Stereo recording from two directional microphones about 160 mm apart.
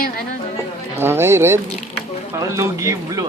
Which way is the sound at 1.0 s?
15° right (ahead or behind).